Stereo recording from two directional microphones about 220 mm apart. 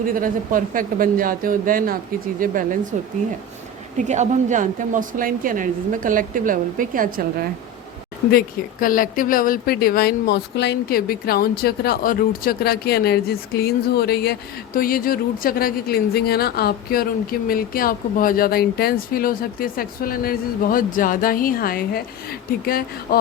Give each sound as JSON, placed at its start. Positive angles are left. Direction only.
{"t": 0.1, "sound": "a woman's voice", "side_deg": -40}
{"t": 3.9, "sound": "a woman's voice", "side_deg": -35}
{"t": 8.3, "sound": "speech", "side_deg": 40}